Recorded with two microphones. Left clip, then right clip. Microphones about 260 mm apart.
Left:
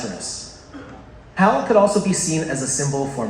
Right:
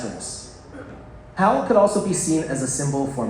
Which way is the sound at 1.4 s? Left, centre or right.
Left.